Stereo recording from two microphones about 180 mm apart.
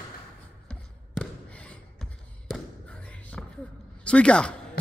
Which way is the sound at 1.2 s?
5° left (ahead or behind).